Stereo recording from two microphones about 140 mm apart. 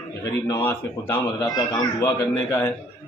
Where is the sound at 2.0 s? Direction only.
15° left (ahead or behind).